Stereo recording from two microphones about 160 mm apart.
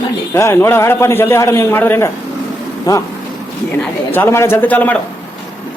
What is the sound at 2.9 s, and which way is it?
Speech, 25° left (ahead or behind).